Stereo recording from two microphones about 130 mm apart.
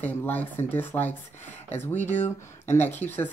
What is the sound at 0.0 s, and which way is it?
Speech, 15° left (ahead or behind).